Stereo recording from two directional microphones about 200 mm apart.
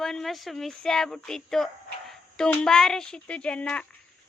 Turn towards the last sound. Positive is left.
turn(degrees=5)  # may be behind; listen again after turning